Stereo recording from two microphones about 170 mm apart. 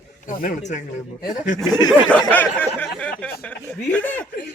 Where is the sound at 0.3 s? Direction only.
50° left (ahead or behind).